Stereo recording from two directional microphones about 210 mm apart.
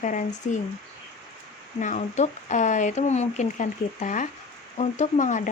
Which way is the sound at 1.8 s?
35° left (ahead or behind).